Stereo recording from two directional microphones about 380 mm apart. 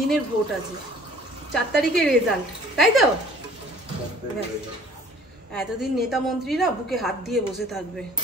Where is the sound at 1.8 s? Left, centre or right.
Centre.